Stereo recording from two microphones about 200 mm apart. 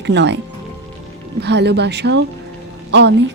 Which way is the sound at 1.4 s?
60° right (ahead or behind).